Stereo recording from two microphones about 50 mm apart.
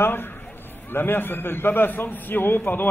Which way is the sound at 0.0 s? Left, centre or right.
Left.